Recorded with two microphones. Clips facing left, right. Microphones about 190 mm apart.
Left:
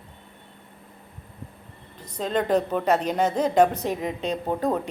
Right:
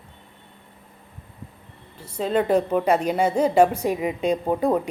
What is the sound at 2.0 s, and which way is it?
A woman's voice, 10° right (ahead or behind).